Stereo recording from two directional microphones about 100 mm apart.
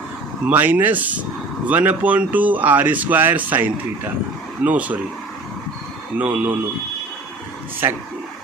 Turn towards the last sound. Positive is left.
turn(degrees=-20)  # may be behind; listen again after turning